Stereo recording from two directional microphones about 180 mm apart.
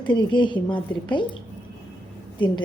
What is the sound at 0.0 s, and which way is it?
A woman's voice, 25° left (ahead or behind).